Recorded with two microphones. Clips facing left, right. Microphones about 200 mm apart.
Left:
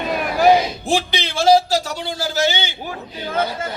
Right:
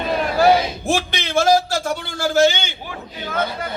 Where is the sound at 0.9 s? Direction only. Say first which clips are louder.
Left 1 dB; 55° right (ahead or behind).